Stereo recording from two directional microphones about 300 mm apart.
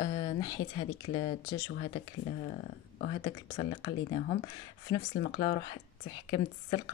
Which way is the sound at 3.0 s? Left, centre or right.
Centre.